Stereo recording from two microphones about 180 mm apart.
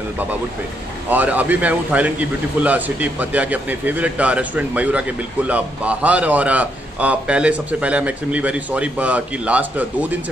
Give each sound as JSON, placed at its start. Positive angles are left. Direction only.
{"t": 1.1, "sound": "a man's voice", "side_deg": -10}